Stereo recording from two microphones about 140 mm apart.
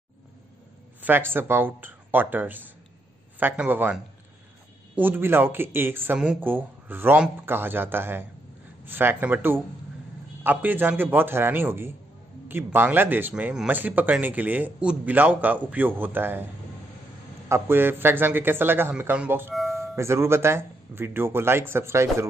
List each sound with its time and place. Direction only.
1.0 s speech: 15° right (ahead or behind)
17.5 s speech: 15° right (ahead or behind)
19.5 s music: centre (ahead or behind)
20.0 s speech: 20° right (ahead or behind)